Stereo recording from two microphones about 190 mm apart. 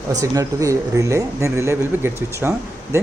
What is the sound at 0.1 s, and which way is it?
Speech, 20° right (ahead or behind).